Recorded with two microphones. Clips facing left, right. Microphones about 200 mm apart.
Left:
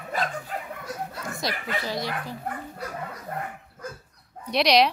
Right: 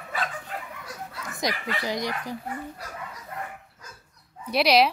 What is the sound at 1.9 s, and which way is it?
Speech, 15° right (ahead or behind).